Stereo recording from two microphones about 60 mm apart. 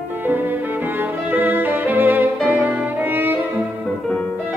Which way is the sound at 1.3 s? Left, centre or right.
Right.